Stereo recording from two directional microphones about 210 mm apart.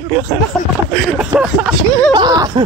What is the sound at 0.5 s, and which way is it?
Speech, centre (ahead or behind).